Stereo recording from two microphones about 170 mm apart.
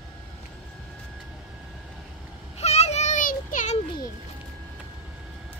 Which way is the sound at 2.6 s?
40° left (ahead or behind).